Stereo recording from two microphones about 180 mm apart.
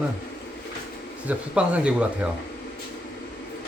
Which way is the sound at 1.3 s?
5° right (ahead or behind).